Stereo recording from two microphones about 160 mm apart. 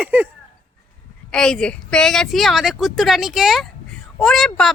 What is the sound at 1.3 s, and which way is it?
Speech, 5° left (ahead or behind).